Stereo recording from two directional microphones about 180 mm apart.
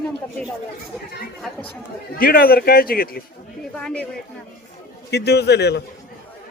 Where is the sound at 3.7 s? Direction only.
5° left (ahead or behind).